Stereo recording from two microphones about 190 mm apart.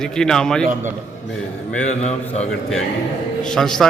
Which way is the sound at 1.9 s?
35° left (ahead or behind).